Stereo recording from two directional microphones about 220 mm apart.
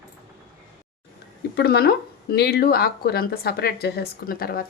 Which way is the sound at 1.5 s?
45° left (ahead or behind).